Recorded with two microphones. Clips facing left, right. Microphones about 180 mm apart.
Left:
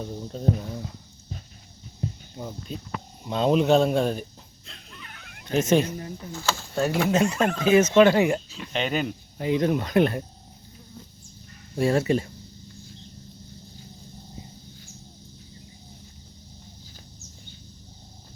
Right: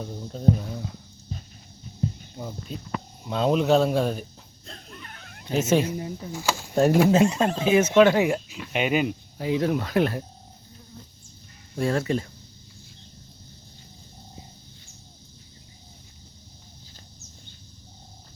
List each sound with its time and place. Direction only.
0.0 s speech: centre (ahead or behind)
2.3 s speech: centre (ahead or behind)
4.6 s dog: 45° right (ahead or behind)
5.5 s speech: 5° right (ahead or behind)
7.1 s speech: 25° right (ahead or behind)
7.6 s speech: 10° right (ahead or behind)
11.8 s speech: 5° left (ahead or behind)